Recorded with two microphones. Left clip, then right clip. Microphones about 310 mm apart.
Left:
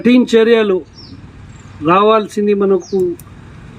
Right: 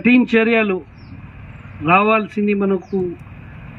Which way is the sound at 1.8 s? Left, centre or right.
Centre.